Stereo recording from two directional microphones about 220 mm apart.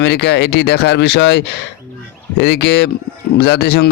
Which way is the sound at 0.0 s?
50° left (ahead or behind).